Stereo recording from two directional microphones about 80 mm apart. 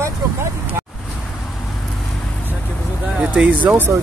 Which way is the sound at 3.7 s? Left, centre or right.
Right.